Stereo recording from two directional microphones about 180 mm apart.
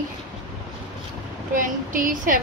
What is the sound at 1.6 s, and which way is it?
Speech, 50° right (ahead or behind).